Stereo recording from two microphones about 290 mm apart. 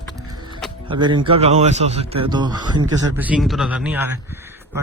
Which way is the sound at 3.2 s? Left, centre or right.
Centre.